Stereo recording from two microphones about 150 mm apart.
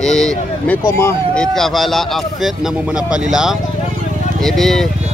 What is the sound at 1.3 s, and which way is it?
Speech, centre (ahead or behind).